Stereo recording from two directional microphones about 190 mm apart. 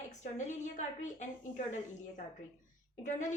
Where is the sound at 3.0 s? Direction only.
40° left (ahead or behind).